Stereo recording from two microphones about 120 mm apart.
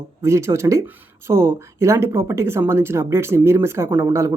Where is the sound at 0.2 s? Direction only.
25° right (ahead or behind).